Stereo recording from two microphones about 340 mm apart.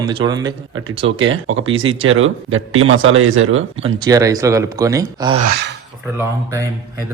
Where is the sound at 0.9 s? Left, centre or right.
Right.